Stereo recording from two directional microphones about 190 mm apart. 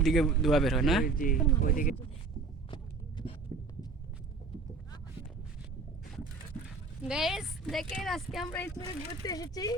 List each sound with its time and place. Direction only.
0.0 s speech: centre (ahead or behind)
1.0 s speech: 45° left (ahead or behind)
2.6 s a sound: 25° left (ahead or behind)
7.1 s speech: centre (ahead or behind)
8.5 s speech: 15° left (ahead or behind)